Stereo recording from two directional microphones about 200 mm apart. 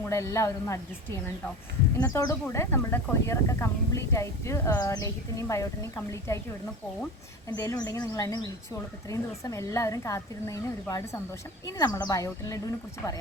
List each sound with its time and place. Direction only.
0.0 s speech: 15° left (ahead or behind)
2.0 s speech: 15° left (ahead or behind)
7.4 s a woman's voice: 15° left (ahead or behind)